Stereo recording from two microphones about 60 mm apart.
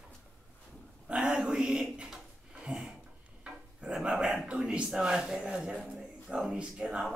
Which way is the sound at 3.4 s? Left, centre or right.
Centre.